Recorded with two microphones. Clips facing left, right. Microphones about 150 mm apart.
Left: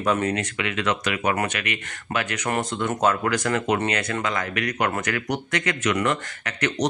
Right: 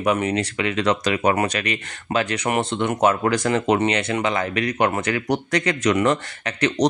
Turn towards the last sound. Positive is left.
turn(degrees=-35)  # may be behind; listen again after turning